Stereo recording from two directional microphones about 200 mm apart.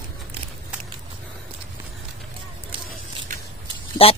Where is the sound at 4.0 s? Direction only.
30° left (ahead or behind).